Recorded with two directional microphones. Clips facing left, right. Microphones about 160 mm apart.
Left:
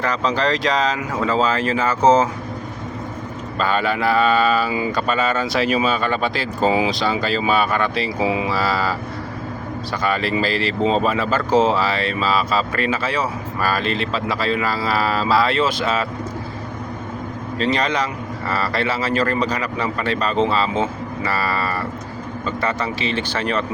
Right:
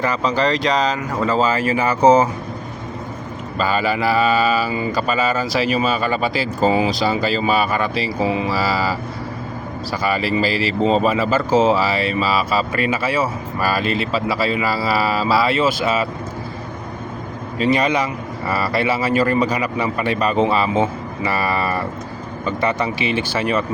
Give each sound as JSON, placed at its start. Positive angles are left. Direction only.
{"t": 0.0, "sound": "speech", "side_deg": -5}
{"t": 3.6, "sound": "speech", "side_deg": -5}
{"t": 17.6, "sound": "speech", "side_deg": -10}